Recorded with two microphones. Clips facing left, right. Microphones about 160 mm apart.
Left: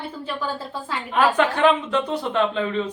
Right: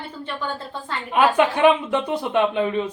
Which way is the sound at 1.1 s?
15° right (ahead or behind).